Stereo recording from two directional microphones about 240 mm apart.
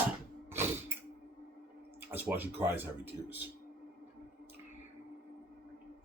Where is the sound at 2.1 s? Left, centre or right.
Centre.